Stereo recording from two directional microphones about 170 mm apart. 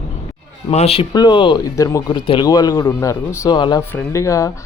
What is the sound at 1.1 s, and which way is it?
Speech, 25° left (ahead or behind).